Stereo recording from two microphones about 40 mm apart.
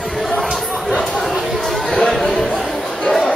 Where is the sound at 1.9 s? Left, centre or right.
Centre.